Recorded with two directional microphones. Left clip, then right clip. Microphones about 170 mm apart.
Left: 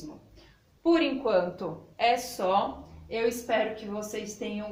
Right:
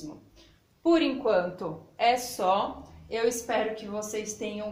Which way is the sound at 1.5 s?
25° right (ahead or behind).